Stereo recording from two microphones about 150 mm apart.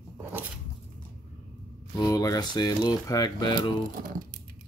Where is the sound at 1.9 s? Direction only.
20° left (ahead or behind).